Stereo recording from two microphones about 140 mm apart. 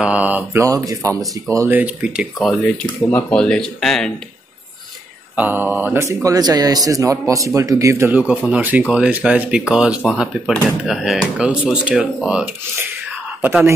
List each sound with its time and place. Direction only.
0.0 s speech: 10° right (ahead or behind)
1.8 s speech: 10° right (ahead or behind)
2.4 s speech: 5° left (ahead or behind)
5.3 s speech: 10° right (ahead or behind)
6.2 s speech: 25° right (ahead or behind)